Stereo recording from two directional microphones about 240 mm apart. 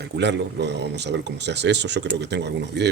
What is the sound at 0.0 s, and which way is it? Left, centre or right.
Speech, right.